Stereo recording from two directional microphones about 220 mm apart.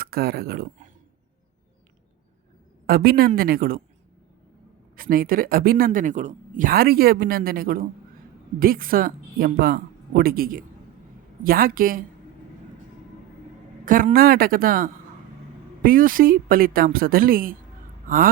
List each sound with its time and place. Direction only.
0.0 s speech: 45° right (ahead or behind)
2.8 s a woman's voice: 45° right (ahead or behind)
4.9 s a woman's voice: 40° right (ahead or behind)
13.8 s a woman's voice: 40° right (ahead or behind)